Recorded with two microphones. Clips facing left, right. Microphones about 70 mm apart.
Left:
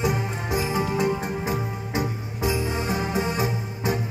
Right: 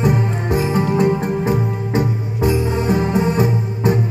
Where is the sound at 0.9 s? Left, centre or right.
Right.